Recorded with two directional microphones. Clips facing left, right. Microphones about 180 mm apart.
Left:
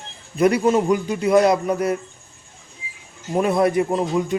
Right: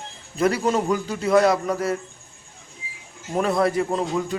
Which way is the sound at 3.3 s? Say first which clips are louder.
Left 3 dB; 15° left (ahead or behind).